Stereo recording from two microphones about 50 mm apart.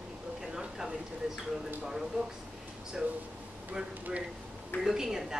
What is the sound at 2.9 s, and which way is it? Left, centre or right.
Speech, centre.